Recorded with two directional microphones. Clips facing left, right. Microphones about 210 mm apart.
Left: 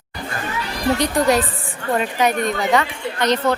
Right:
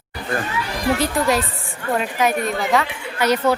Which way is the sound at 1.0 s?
Centre (ahead or behind).